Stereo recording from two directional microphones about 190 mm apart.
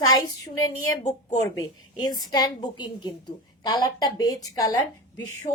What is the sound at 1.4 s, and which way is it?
A woman's voice, 20° left (ahead or behind).